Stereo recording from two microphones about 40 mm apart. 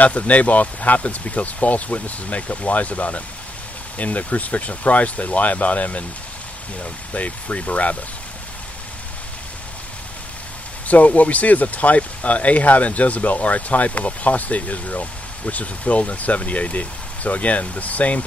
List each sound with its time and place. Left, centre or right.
0.0 s speech: left
10.9 s speech: left